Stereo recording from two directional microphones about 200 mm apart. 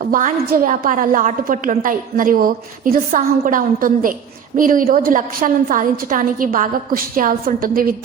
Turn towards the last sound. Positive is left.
turn(degrees=-45)  # may be behind; listen again after turning